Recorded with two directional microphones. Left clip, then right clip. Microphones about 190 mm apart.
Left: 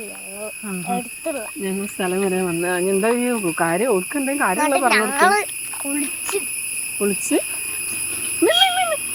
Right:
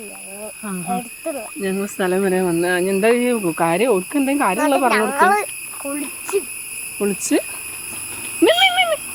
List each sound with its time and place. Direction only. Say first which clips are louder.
0.6 s speech: right 1 dB; 15° right (ahead or behind)
1.2 s speech: even; 5° left (ahead or behind)
1.6 s speech: right 4 dB; 25° right (ahead or behind)
4.5 s speech: left 1 dB; 15° right (ahead or behind)
7.0 s speech: right 1 dB; 25° right (ahead or behind)
8.4 s a sound: right 2 dB; 40° right (ahead or behind)